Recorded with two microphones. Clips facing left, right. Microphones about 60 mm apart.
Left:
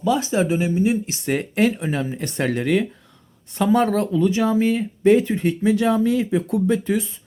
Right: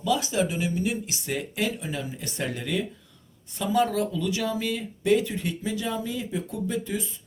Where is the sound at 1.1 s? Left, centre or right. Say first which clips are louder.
Left 8 dB; left.